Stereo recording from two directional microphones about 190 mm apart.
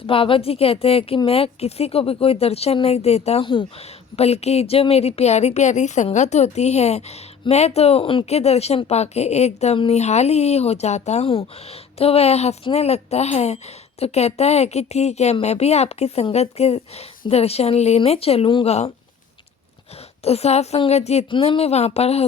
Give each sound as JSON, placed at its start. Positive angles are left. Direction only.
{"t": 0.1, "sound": "speech", "side_deg": 30}
{"t": 20.2, "sound": "speech", "side_deg": 35}